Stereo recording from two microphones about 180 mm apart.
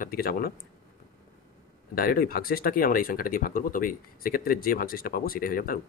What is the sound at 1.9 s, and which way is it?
Speech, 55° left (ahead or behind).